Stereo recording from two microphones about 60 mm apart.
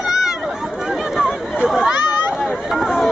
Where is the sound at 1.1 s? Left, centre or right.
Centre.